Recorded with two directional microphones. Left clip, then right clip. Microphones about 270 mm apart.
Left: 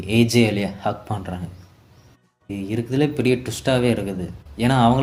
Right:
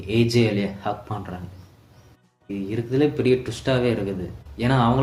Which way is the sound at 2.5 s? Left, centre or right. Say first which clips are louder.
Even; left.